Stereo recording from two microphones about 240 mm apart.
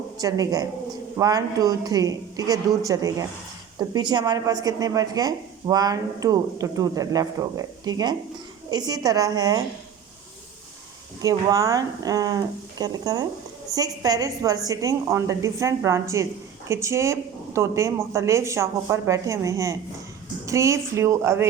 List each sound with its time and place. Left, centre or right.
0.2 s a woman's voice: centre
11.2 s a woman's voice: centre